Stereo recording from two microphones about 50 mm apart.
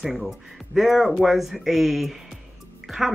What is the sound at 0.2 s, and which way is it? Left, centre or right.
Speech, centre.